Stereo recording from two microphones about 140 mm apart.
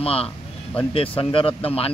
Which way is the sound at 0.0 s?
45° left (ahead or behind).